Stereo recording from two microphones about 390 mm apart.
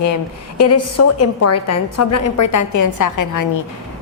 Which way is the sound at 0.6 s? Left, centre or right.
Left.